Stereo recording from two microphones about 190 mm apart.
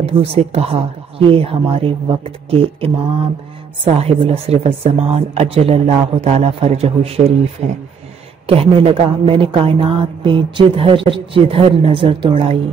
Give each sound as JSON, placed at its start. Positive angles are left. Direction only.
{"t": 0.0, "sound": "speech", "side_deg": -30}
{"t": 8.5, "sound": "a man's voice", "side_deg": -30}